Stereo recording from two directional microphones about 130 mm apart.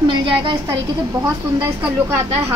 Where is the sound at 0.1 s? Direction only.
40° right (ahead or behind).